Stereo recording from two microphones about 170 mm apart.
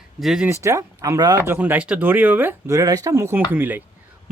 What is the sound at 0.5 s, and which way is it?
Speech, 15° right (ahead or behind).